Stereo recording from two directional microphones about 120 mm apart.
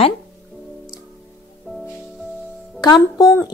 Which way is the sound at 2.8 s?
30° left (ahead or behind).